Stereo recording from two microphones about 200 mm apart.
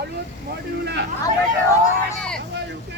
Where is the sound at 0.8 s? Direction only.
60° right (ahead or behind).